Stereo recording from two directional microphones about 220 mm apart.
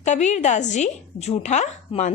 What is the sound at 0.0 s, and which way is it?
A woman's voice, 30° left (ahead or behind).